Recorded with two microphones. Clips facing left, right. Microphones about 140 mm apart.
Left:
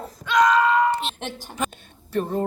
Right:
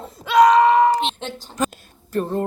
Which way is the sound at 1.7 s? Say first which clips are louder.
Right 1 dB; 35° right (ahead or behind).